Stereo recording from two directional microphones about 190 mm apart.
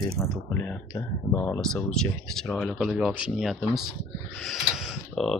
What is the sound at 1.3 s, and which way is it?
Speech, 10° left (ahead or behind).